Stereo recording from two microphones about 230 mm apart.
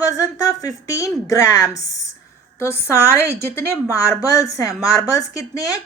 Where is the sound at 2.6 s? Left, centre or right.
Centre.